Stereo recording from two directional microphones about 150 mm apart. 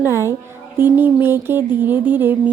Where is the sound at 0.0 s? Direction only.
15° right (ahead or behind).